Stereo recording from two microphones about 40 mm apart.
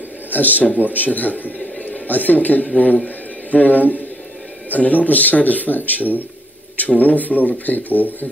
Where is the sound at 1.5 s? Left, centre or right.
Left.